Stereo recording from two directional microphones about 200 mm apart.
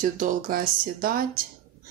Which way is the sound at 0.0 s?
40° right (ahead or behind).